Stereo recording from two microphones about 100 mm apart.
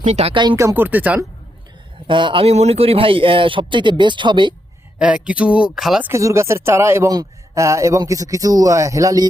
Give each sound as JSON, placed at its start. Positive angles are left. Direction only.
{"t": 0.1, "sound": "speech", "side_deg": -90}
{"t": 0.5, "sound": "speech", "side_deg": -30}
{"t": 0.9, "sound": "speech", "side_deg": -15}
{"t": 2.0, "sound": "speech", "side_deg": -55}
{"t": 2.4, "sound": "speech", "side_deg": -90}
{"t": 4.9, "sound": "speech", "side_deg": -10}
{"t": 6.0, "sound": "a man's voice", "side_deg": -25}